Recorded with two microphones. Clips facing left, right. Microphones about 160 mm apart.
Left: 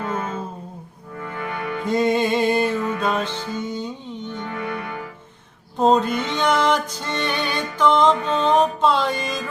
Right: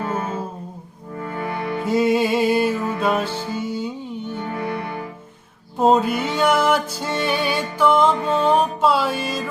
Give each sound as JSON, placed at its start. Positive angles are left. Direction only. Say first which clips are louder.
{"t": 1.2, "sound": "music", "louder": "right 2 dB", "side_deg": -35}
{"t": 1.8, "sound": "music", "louder": "right 1 dB", "side_deg": -5}
{"t": 4.4, "sound": "music", "louder": "right 2 dB", "side_deg": -35}
{"t": 5.7, "sound": "music", "louder": "right 1 dB", "side_deg": -5}